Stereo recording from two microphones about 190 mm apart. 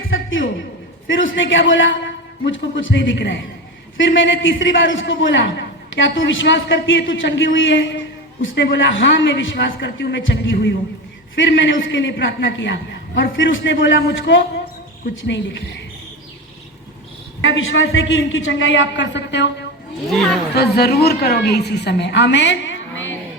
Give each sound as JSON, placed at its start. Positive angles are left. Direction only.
{"t": 0.1, "sound": "a sound", "side_deg": 90}
{"t": 1.0, "sound": "a man's voice", "side_deg": 85}
{"t": 15.1, "sound": "a woman's voice", "side_deg": 70}
{"t": 17.4, "sound": "a man's voice", "side_deg": 90}
{"t": 20.6, "sound": "a woman's voice", "side_deg": 55}